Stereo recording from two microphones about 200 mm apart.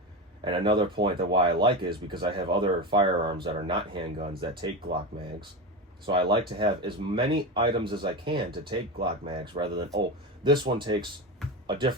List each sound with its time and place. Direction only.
0.4 s speech: 25° right (ahead or behind)
6.6 s speech: 25° right (ahead or behind)
8.4 s speech: 55° right (ahead or behind)
9.0 s speech: 25° right (ahead or behind)